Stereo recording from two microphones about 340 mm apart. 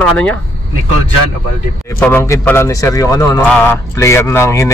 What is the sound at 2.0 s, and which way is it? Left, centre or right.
A man's voice, centre.